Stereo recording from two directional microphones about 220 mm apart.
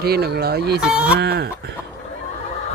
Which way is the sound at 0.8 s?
5° right (ahead or behind).